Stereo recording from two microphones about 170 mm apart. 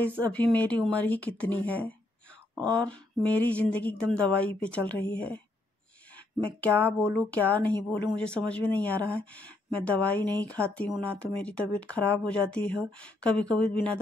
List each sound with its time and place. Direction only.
0.3 s speech: 10° left (ahead or behind)
2.5 s speech: 20° right (ahead or behind)
2.8 s speech: 10° left (ahead or behind)